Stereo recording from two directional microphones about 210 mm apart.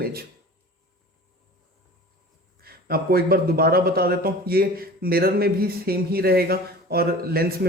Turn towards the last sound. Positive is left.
turn(degrees=-45)  # may be behind; listen again after turning